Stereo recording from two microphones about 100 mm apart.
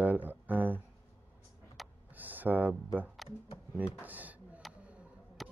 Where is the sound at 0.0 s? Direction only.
15° right (ahead or behind).